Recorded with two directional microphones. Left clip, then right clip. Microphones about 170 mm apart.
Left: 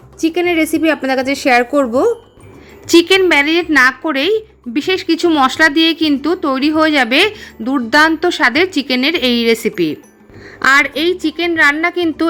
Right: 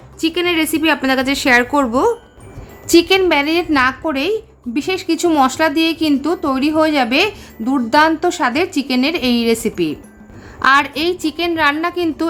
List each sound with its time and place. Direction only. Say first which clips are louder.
0.2 s a woman's voice: left 2 dB; 10° left (ahead or behind)